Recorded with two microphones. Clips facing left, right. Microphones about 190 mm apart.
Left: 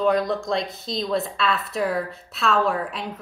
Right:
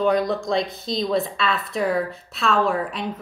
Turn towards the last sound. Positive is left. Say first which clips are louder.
# right 1 dB
turn(degrees=0)  # may be behind; listen again after turning